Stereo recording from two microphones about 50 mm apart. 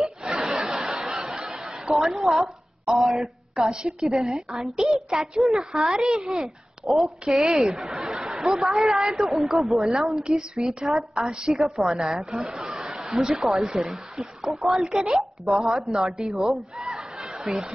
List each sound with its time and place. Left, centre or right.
0.0 s laughter: centre
1.1 s snicker: centre
3.7 s speech: centre
6.8 s speech: centre
9.8 s speech: centre
11.6 s speech: centre
16.7 s chatter: centre